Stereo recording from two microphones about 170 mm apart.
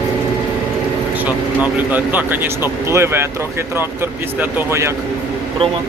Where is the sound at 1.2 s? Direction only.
10° right (ahead or behind).